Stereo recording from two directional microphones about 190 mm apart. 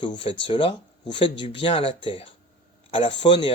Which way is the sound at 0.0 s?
25° left (ahead or behind).